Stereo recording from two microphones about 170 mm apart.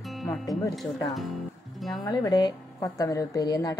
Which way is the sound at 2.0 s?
25° left (ahead or behind).